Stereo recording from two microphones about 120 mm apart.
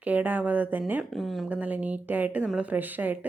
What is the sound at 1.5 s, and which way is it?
Speech, 10° right (ahead or behind).